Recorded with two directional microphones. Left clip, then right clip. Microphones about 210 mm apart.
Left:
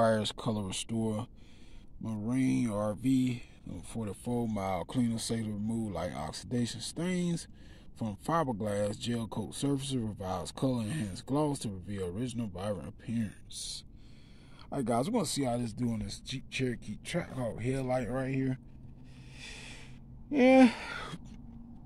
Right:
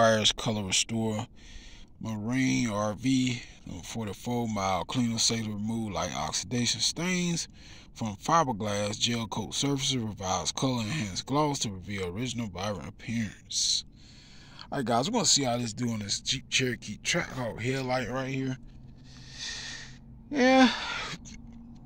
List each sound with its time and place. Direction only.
0.0 s speech: 5° left (ahead or behind)
18.2 s a man's voice: 20° left (ahead or behind)
19.3 s gasp: 25° left (ahead or behind)